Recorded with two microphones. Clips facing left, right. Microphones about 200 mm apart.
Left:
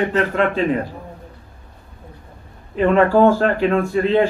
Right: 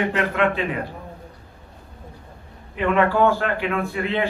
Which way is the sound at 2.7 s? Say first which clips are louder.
Left 5 dB; 35° left (ahead or behind).